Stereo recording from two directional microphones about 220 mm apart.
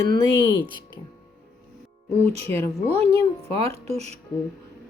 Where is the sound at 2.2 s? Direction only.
30° right (ahead or behind).